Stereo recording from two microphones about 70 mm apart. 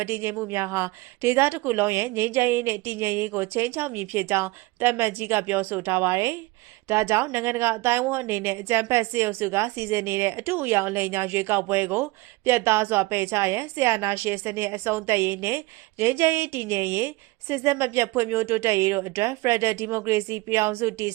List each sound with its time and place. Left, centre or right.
0.0 s speech: right